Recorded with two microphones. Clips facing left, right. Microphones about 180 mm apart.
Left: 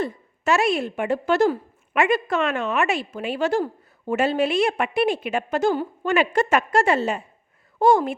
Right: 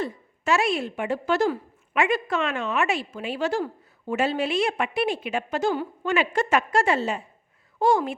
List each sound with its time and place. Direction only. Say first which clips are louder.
0.0 s speech: left 3 dB; 50° left (ahead or behind)